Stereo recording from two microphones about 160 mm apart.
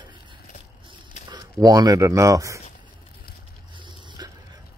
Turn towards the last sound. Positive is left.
turn(degrees=-30)  # may be behind; listen again after turning